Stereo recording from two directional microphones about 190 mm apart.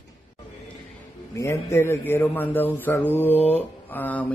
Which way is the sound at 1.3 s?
15° left (ahead or behind).